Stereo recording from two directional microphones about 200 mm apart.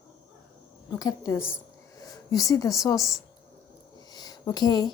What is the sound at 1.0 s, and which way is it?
Speech, 15° left (ahead or behind).